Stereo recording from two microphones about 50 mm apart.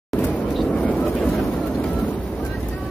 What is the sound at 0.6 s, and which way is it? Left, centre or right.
Vehicle, left.